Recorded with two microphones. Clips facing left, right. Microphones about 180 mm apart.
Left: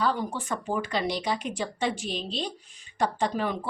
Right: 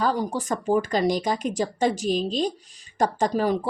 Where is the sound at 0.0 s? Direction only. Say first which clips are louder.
Right 3 dB; 40° right (ahead or behind).